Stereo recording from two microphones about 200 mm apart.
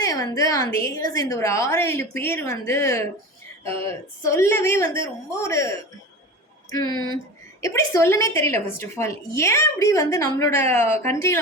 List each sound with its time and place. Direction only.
0.0 s a woman's voice: 15° left (ahead or behind)